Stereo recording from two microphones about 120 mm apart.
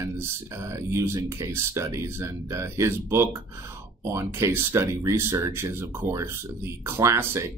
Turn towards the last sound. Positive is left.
turn(degrees=-25)  # may be behind; listen again after turning